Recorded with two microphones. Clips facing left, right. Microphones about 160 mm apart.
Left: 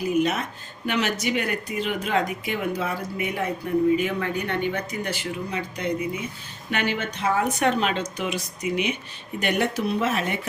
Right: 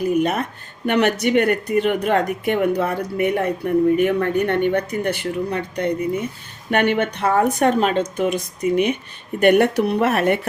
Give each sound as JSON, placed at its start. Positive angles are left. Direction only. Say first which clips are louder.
{"t": 0.2, "sound": "speech", "louder": "right 3 dB", "side_deg": -55}